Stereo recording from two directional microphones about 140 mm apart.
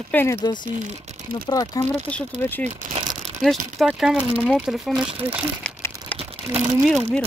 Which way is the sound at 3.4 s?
Centre (ahead or behind).